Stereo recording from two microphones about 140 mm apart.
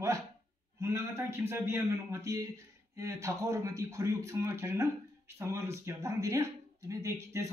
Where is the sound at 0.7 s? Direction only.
20° right (ahead or behind).